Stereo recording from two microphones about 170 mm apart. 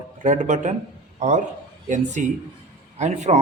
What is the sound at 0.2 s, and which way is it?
Speech, 45° right (ahead or behind).